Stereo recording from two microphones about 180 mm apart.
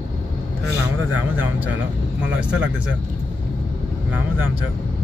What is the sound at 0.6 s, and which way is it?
Speech, 10° right (ahead or behind).